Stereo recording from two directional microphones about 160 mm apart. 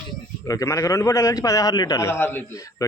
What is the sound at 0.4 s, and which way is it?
A man's voice, 20° left (ahead or behind).